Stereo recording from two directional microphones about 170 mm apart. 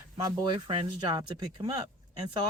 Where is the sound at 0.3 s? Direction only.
30° right (ahead or behind).